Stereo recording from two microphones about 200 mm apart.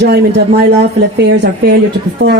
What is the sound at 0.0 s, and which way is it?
Speech, 55° right (ahead or behind).